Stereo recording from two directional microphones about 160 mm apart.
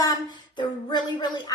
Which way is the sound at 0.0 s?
25° left (ahead or behind).